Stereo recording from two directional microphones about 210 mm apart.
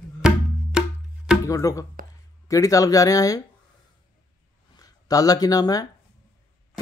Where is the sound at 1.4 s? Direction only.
15° left (ahead or behind).